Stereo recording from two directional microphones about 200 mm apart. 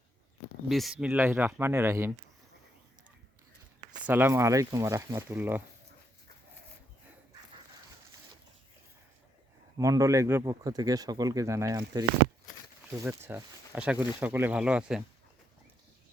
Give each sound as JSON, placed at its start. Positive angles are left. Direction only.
{"t": 0.7, "sound": "speech", "side_deg": 0}
{"t": 4.0, "sound": "speech", "side_deg": -10}
{"t": 9.7, "sound": "speech", "side_deg": -15}